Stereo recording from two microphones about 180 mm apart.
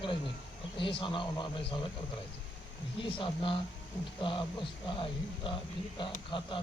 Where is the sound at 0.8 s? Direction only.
30° left (ahead or behind).